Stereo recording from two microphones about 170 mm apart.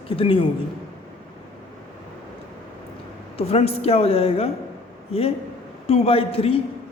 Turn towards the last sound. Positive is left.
turn(degrees=35)  # may be behind; listen again after turning